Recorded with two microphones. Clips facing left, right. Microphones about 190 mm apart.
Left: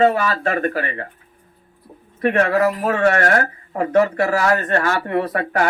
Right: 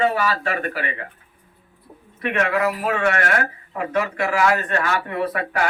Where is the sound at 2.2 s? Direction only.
40° left (ahead or behind).